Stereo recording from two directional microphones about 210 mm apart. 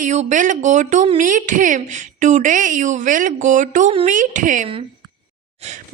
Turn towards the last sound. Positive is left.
turn(degrees=-30)  # may be behind; listen again after turning